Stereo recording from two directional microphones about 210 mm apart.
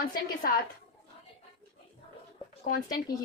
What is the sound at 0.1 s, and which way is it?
Speech, 45° left (ahead or behind).